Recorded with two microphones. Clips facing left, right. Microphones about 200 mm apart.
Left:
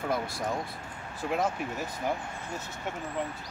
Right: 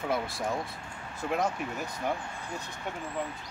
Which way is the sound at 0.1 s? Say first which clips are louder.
Right 1 dB; centre (ahead or behind).